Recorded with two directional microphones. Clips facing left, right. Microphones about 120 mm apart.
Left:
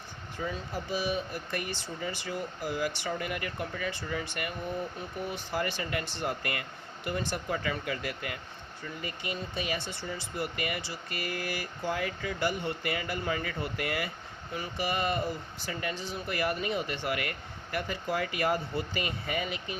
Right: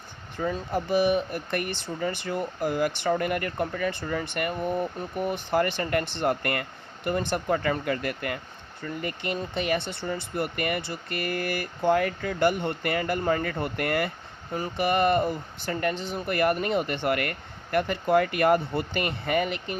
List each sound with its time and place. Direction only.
0.3 s speech: 55° right (ahead or behind)